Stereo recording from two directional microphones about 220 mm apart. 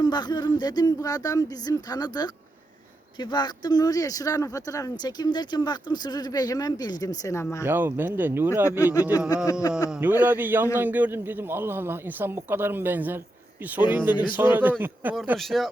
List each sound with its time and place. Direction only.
0.0 s speech: 20° left (ahead or behind)
7.6 s speech: 10° right (ahead or behind)
8.8 s speech: 15° left (ahead or behind)
10.0 s speech: 10° right (ahead or behind)